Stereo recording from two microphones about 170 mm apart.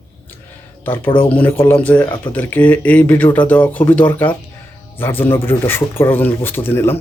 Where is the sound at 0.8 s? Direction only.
10° left (ahead or behind).